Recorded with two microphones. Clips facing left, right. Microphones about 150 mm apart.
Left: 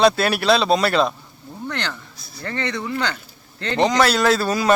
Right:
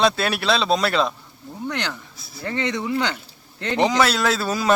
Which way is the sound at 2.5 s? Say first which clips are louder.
Right 2 dB; 20° right (ahead or behind).